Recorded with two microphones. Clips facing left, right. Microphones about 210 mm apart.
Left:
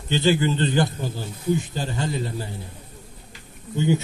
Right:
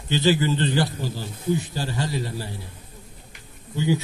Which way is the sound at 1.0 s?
55° left (ahead or behind).